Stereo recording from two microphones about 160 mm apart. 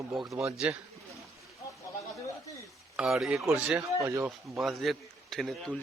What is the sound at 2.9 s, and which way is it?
Speech, 5° right (ahead or behind).